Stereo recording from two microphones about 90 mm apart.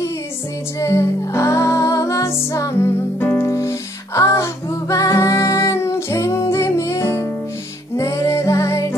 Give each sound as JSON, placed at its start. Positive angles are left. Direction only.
{"t": 0.7, "sound": "music", "side_deg": 30}